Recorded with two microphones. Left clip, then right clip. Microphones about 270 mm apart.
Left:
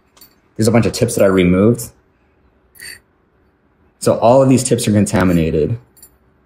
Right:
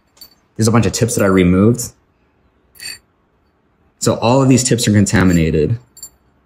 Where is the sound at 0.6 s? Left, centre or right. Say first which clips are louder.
Left 1 dB; right.